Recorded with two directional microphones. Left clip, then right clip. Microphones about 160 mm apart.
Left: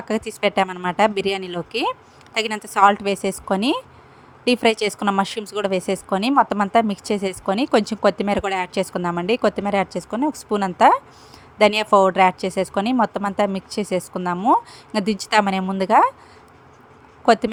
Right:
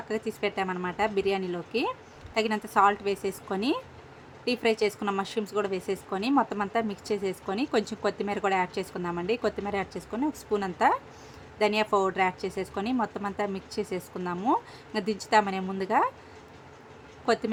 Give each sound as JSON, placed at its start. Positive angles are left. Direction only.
{"t": 0.1, "sound": "a woman's voice", "side_deg": 45}
{"t": 17.2, "sound": "speech", "side_deg": 40}